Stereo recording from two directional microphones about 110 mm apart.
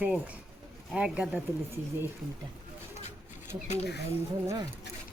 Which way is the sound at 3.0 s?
90° left.